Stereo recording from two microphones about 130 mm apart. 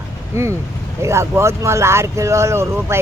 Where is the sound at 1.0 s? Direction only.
20° right (ahead or behind).